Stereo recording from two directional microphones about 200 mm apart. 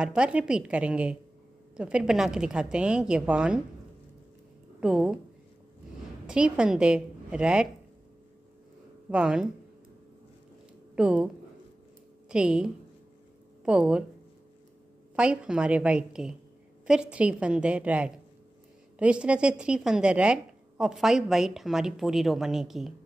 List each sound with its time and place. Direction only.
0.0 s a woman's voice: 5° right (ahead or behind)
4.7 s a woman's voice: 5° right (ahead or behind)
6.2 s a woman's voice: 5° right (ahead or behind)
9.1 s a woman's voice: 5° right (ahead or behind)
11.0 s a woman's voice: 5° right (ahead or behind)
12.3 s a woman's voice: 5° right (ahead or behind)
15.1 s a woman's voice: 5° right (ahead or behind)